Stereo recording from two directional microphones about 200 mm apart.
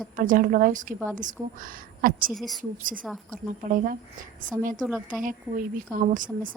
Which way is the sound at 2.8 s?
45° right (ahead or behind).